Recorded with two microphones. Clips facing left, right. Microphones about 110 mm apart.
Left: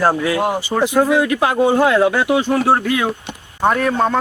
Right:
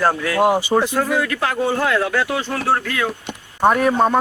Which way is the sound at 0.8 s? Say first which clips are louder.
Left 5 dB; 15° left (ahead or behind).